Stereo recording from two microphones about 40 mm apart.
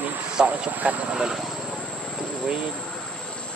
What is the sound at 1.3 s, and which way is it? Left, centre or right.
Vehicle, centre.